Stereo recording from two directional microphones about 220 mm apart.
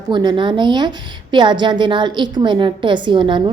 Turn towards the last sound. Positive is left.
turn(degrees=-20)  # may be behind; listen again after turning